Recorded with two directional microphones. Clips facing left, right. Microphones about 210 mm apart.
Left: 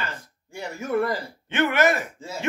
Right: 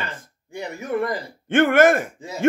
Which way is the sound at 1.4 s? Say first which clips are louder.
Right 6 dB; 50° right (ahead or behind).